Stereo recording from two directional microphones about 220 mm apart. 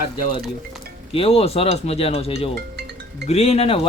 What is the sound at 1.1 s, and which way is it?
Speech, 25° left (ahead or behind).